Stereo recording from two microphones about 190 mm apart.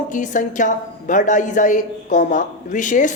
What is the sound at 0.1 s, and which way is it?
A woman's voice, 40° left (ahead or behind).